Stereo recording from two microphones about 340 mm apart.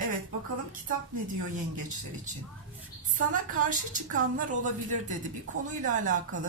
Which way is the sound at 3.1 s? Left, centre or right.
Right.